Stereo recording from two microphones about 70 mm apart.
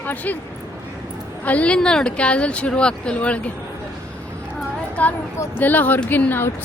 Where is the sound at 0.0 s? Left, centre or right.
Left.